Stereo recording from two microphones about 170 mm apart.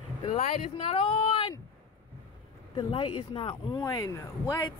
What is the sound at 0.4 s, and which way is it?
Speech, 45° left (ahead or behind).